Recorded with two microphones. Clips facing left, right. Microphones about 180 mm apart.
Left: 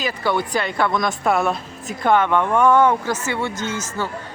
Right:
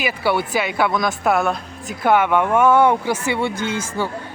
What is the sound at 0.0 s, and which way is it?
A woman's voice, 10° right (ahead or behind).